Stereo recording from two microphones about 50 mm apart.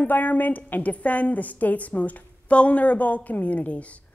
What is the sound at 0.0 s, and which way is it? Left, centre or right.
A woman's voice, left.